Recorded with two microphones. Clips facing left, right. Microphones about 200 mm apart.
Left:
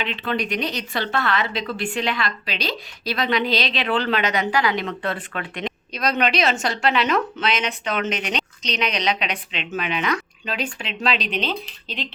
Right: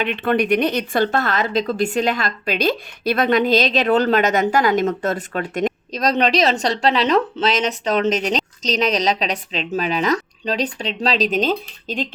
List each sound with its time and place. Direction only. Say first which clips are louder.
0.0 s a woman's voice: right 6 dB; 50° right (ahead or behind)